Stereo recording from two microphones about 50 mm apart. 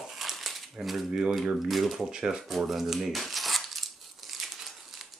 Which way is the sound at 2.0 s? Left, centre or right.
Centre.